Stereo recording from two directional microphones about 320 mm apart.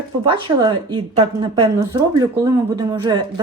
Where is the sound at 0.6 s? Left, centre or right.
Centre.